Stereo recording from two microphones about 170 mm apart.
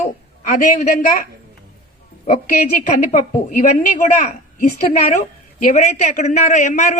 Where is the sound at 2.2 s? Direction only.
50° left (ahead or behind).